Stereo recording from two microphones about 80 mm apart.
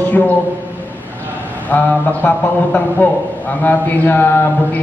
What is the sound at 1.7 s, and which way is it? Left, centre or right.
A man's voice, left.